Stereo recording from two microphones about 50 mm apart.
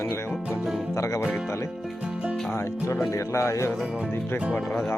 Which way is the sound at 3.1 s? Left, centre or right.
Left.